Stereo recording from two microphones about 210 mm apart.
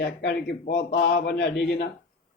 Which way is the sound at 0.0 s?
55° left (ahead or behind).